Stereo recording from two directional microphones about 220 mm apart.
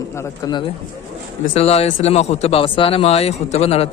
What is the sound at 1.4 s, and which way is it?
Speech, 30° left (ahead or behind).